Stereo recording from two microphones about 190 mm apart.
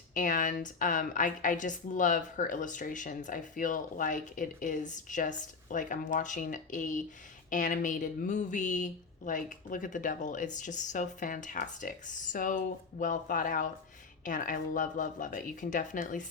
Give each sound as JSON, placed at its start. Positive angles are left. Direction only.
{"t": 0.1, "sound": "a woman's voice", "side_deg": 45}